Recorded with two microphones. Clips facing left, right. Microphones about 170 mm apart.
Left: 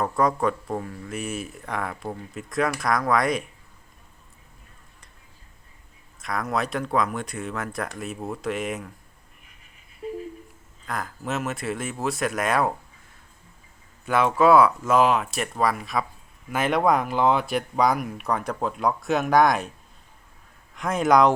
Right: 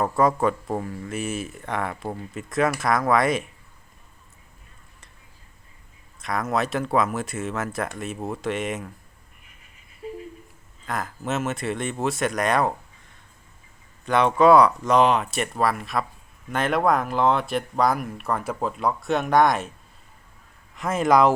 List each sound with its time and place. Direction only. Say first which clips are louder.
0.0 s speech: right 2 dB; 5° right (ahead or behind)
6.2 s speech: right 2 dB; centre (ahead or behind)
10.0 s a sound: left 2 dB; 30° left (ahead or behind)
10.8 s speech: right 2 dB; centre (ahead or behind)
14.0 s speech: right 2 dB; 5° left (ahead or behind)
20.7 s speech: even; centre (ahead or behind)